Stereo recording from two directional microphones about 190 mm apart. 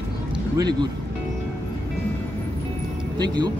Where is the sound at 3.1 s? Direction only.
20° right (ahead or behind).